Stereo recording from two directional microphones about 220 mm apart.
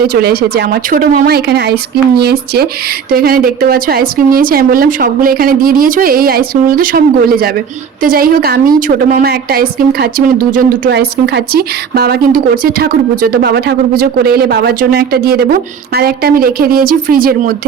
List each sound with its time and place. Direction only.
0.1 s speech: 45° right (ahead or behind)